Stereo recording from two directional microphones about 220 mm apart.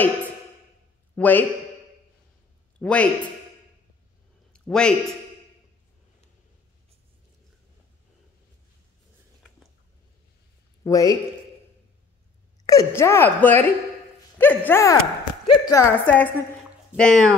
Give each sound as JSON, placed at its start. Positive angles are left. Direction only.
{"t": 1.1, "sound": "a man's voice", "side_deg": 10}
{"t": 2.8, "sound": "speech", "side_deg": 5}
{"t": 4.5, "sound": "a sound", "side_deg": 5}
{"t": 10.8, "sound": "speech", "side_deg": 15}
{"t": 12.6, "sound": "a woman's voice", "side_deg": 15}